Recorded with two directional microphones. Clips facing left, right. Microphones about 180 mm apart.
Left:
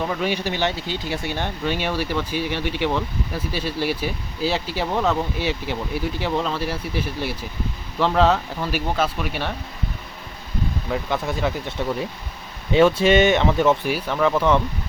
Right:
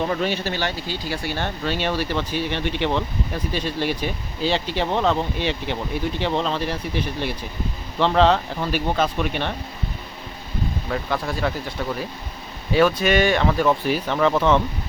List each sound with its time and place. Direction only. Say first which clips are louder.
0.2 s speech: left 1 dB; 15° left (ahead or behind)
10.8 s speech: left 1 dB; 15° left (ahead or behind)
13.8 s speech: right 1 dB; 10° left (ahead or behind)